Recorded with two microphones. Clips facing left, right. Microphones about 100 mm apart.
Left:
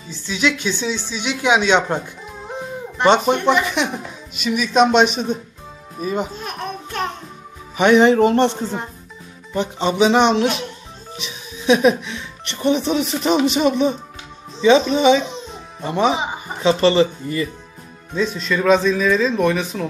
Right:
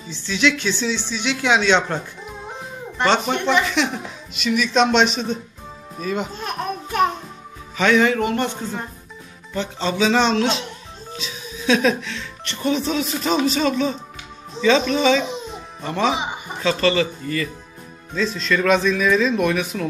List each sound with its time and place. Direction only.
0.1 s speech: 10° left (ahead or behind)
3.0 s speech: 15° left (ahead or behind)
6.4 s a sound: 5° right (ahead or behind)
7.7 s speech: 20° left (ahead or behind)
18.1 s speech: 10° left (ahead or behind)
18.7 s speech: centre (ahead or behind)